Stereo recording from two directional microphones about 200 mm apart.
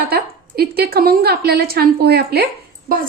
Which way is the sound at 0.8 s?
50° right (ahead or behind).